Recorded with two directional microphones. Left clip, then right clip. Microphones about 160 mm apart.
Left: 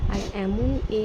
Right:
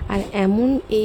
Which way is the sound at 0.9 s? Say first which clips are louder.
Right 5 dB; 30° right (ahead or behind).